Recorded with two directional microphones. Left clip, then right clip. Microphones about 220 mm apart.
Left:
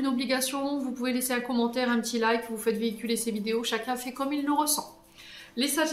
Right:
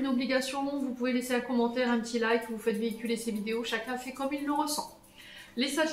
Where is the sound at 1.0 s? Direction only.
40° left (ahead or behind).